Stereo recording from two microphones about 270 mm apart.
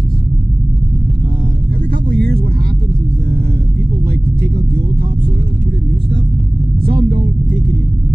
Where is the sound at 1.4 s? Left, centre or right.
Right.